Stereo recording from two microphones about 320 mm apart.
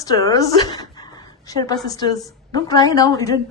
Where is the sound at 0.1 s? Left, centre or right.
Centre.